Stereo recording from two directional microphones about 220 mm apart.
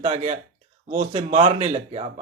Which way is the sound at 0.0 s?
30° right (ahead or behind).